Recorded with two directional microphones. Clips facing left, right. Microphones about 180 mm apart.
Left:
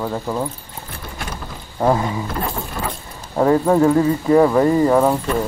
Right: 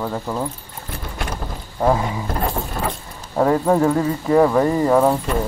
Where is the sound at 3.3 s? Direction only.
5° left (ahead or behind).